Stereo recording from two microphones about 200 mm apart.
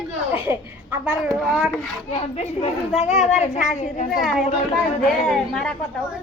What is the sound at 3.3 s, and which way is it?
Speech, 35° left (ahead or behind).